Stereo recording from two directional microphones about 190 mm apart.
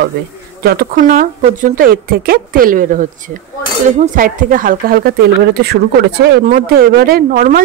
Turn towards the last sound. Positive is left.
turn(degrees=-50)  # may be behind; listen again after turning